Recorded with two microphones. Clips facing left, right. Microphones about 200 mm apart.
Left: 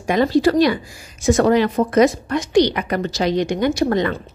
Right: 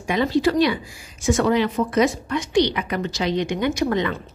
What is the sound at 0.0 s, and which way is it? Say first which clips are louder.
A woman's voice: left 4 dB; 45° left (ahead or behind).